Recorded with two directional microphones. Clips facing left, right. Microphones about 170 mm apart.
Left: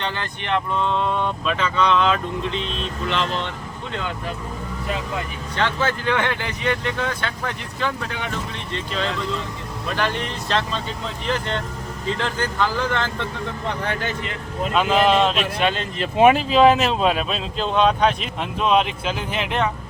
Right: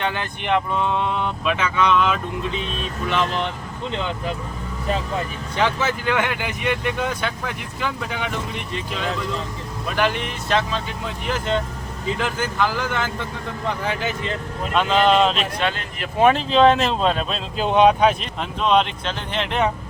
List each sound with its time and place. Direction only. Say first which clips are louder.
0.0 s speech: right 2 dB; 15° right (ahead or behind)
5.5 s speech: right 1 dB; 10° right (ahead or behind)
14.7 s speech: even; 5° left (ahead or behind)
15.6 s speech: left 3 dB; 25° left (ahead or behind)
16.2 s speech: left 1 dB; 5° left (ahead or behind)
17.6 s speech: right 3 dB; 15° right (ahead or behind)
18.2 s speech: left 1 dB; 5° left (ahead or behind)